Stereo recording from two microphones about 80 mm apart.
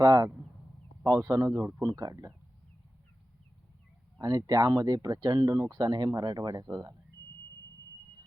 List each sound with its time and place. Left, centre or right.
0.0 s speech: right
1.8 s speech: right
4.2 s speech: right